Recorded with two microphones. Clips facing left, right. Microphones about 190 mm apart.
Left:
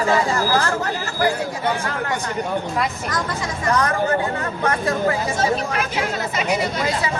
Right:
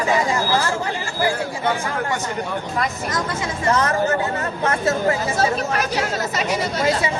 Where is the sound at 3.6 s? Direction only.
25° right (ahead or behind).